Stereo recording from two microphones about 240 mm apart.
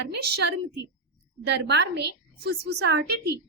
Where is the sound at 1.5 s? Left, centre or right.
Right.